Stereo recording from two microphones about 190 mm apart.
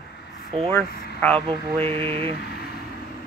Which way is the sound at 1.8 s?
30° right (ahead or behind).